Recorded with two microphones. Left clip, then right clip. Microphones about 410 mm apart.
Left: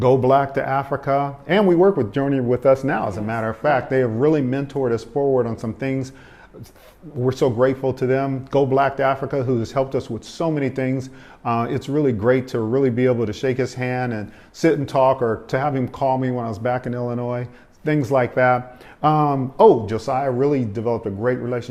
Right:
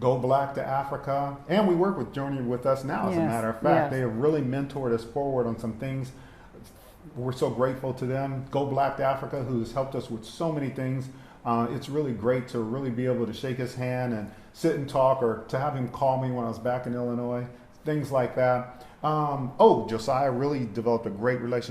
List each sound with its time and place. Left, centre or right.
0.0 s speech: left
7.3 s speech: left
19.0 s speech: left
19.6 s speech: left